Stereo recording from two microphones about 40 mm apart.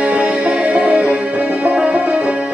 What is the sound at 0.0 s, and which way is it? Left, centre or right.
Music, right.